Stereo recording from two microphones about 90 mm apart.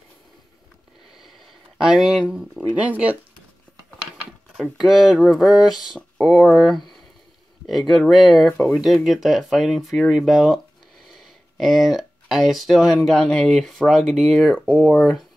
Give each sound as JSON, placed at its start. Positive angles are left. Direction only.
{"t": 1.8, "sound": "speech", "side_deg": -5}
{"t": 4.6, "sound": "speech", "side_deg": -5}
{"t": 14.0, "sound": "speech", "side_deg": -5}
{"t": 14.5, "sound": "speech", "side_deg": 15}
{"t": 15.0, "sound": "speech", "side_deg": 0}